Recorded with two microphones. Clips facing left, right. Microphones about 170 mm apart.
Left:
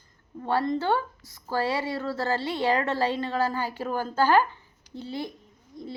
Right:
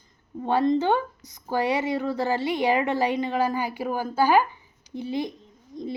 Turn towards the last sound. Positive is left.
turn(degrees=-20)  # may be behind; listen again after turning